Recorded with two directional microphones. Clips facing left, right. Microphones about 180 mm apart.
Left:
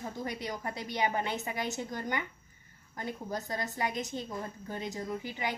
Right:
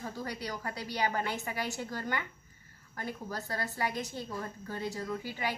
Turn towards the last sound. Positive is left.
turn(degrees=20)  # may be behind; listen again after turning